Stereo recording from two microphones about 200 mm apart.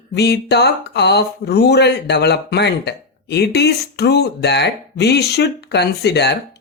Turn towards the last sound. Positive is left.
turn(degrees=55)  # may be behind; listen again after turning